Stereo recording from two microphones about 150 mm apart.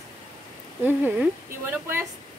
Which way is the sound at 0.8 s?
15° right (ahead or behind).